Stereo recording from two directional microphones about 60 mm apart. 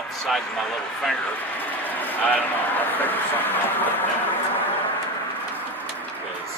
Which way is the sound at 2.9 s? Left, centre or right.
Left.